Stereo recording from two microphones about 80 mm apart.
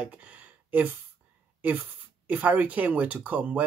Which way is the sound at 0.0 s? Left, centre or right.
Centre.